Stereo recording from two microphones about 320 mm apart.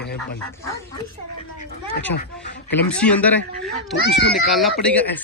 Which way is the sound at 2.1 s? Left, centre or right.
Left.